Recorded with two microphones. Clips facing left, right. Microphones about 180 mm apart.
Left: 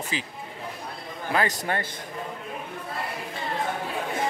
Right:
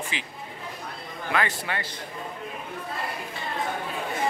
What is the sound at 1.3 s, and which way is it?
Speech, 40° left (ahead or behind).